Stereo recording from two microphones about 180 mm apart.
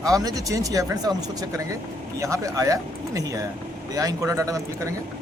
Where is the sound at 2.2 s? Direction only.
15° right (ahead or behind).